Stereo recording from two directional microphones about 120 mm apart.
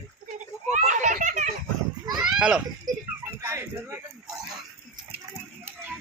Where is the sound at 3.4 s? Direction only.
20° right (ahead or behind).